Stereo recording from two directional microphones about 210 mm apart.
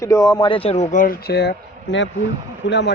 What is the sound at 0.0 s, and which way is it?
Speech, 15° left (ahead or behind).